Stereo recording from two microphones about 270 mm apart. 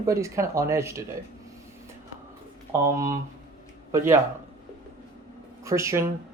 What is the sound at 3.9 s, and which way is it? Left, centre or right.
Speech, centre.